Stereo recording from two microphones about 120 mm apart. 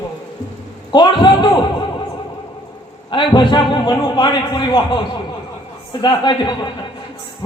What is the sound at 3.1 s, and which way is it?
A man's voice, 40° left (ahead or behind).